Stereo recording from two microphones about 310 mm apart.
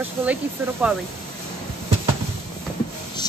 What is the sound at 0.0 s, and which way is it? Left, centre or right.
Speech, centre.